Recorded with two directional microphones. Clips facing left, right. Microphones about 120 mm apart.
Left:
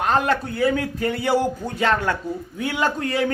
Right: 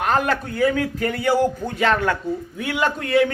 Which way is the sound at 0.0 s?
25° left (ahead or behind).